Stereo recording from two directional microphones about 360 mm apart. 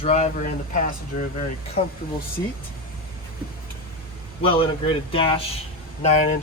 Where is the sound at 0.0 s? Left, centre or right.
Centre.